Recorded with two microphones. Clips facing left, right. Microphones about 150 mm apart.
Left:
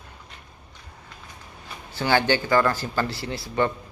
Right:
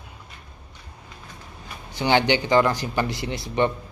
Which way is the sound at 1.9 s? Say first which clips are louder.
Right 1 dB; 20° right (ahead or behind).